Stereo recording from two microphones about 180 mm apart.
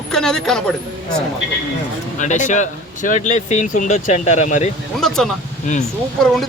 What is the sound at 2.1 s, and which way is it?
Speech, 45° left (ahead or behind).